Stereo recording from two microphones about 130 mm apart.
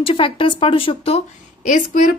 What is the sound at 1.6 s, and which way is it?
Speech, 80° left.